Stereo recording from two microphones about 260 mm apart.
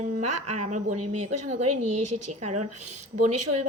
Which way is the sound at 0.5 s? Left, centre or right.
Right.